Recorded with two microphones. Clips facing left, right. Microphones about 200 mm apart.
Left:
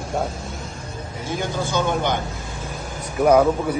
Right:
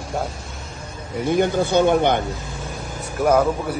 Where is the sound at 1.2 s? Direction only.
60° right (ahead or behind).